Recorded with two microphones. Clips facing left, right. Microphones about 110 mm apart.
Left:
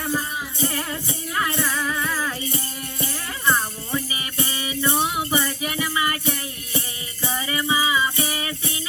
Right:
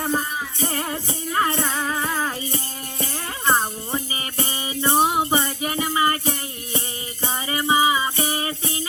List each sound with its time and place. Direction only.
0.0 s music: 25° right (ahead or behind)